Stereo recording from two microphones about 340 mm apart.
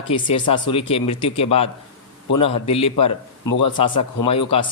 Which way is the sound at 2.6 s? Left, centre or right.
Centre.